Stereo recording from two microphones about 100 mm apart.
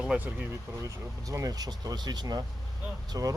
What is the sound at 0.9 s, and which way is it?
Speech, 35° right (ahead or behind).